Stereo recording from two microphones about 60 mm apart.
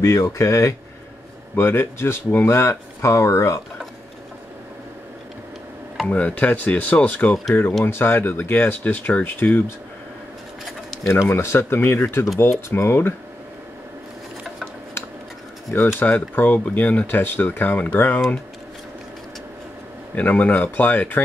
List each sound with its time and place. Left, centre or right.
0.0 s speech: left
1.5 s speech: left
6.0 s speech: left
11.2 s speech: left
16.0 s speech: left
20.2 s speech: left